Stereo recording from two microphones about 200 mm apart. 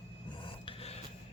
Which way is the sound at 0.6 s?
30° left (ahead or behind).